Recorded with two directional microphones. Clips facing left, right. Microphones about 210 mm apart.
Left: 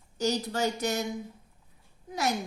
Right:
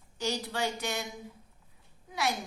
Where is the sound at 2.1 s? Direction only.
40° left (ahead or behind).